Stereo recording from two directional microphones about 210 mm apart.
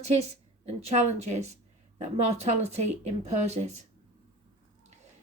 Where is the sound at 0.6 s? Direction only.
30° right (ahead or behind).